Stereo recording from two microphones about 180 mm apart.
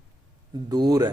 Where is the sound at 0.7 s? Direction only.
20° right (ahead or behind).